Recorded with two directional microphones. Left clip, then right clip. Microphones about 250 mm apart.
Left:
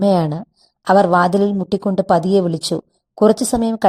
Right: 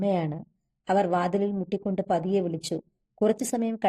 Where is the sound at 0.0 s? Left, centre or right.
Left.